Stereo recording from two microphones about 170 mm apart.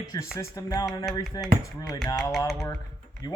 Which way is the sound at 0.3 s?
20° left (ahead or behind).